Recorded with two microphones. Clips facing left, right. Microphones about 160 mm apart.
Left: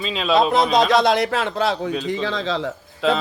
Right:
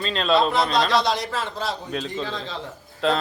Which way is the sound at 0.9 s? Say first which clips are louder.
Left 5 dB; 55° left (ahead or behind).